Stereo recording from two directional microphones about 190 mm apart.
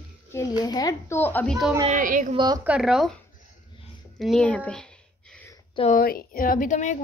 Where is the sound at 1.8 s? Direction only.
45° right (ahead or behind).